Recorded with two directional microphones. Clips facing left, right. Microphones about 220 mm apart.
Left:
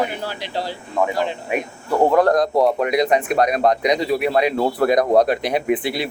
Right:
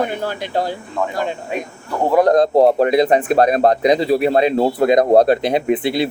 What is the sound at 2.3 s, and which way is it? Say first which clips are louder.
Speech: right 5 dB; 30° right (ahead or behind).